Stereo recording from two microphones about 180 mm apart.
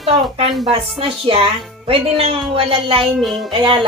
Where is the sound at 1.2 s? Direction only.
30° right (ahead or behind).